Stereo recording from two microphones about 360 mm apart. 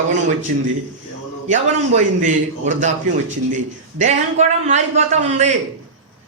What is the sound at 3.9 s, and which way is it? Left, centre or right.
A man's voice, centre.